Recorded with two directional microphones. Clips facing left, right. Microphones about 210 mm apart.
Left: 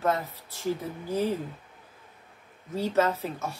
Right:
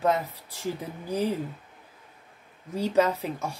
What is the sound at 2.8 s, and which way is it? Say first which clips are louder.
Speech: right 2 dB; 15° right (ahead or behind).